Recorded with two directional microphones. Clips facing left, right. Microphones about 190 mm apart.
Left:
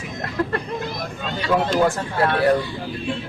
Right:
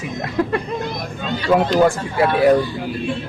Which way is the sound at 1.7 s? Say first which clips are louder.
Right 4 dB; 15° right (ahead or behind).